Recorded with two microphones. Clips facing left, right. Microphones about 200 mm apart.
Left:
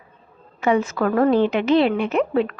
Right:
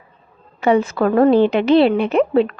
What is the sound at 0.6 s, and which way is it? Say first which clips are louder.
Speech: right 4 dB; 35° right (ahead or behind).